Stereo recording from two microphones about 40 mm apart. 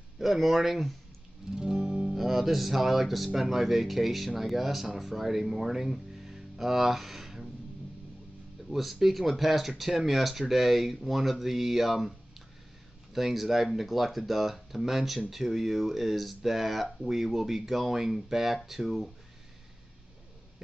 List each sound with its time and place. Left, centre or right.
0.2 s speech: centre
1.5 s music: centre
3.3 s speech: centre
8.6 s speech: centre